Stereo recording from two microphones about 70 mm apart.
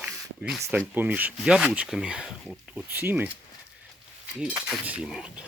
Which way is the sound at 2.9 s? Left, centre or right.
Right.